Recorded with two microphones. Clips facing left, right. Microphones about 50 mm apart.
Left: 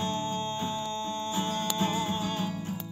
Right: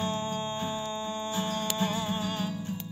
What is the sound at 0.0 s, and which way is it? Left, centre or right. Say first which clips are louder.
Music: even; centre.